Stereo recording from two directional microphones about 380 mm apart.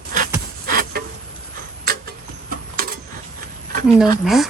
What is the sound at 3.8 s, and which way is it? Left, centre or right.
Speech, centre.